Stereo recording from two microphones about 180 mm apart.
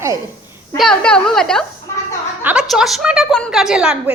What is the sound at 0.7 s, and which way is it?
A woman's voice, 5° left (ahead or behind).